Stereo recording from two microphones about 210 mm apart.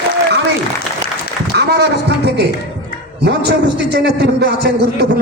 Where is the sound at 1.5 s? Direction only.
50° right (ahead or behind).